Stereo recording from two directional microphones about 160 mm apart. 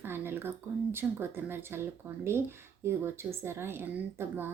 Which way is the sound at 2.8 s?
15° right (ahead or behind).